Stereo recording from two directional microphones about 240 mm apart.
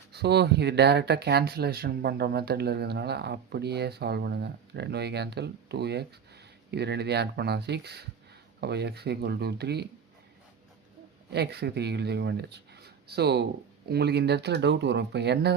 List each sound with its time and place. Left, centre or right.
0.1 s speech: right
11.3 s speech: right